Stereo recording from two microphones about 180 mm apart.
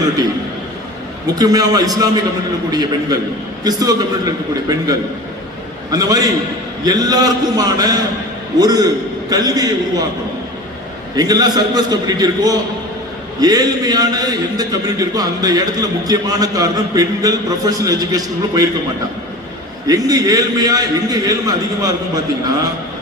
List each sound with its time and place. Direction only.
1.4 s a man's voice: 20° right (ahead or behind)
3.6 s a man's voice: 20° right (ahead or behind)
11.2 s a man's voice: 20° right (ahead or behind)
19.9 s a man's voice: 20° right (ahead or behind)